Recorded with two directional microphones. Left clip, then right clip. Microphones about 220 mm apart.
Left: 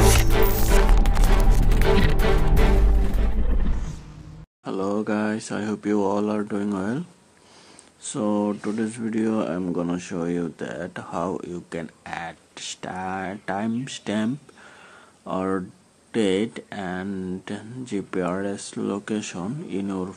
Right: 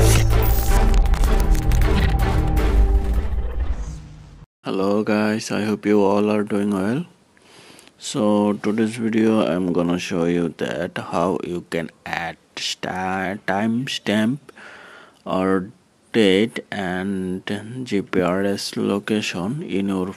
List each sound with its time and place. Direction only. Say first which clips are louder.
0.0 s music: left 1 dB; centre (ahead or behind)
4.6 s speech: right 5 dB; 25° right (ahead or behind)